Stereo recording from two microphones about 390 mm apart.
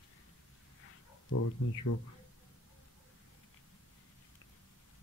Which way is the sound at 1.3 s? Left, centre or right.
Left.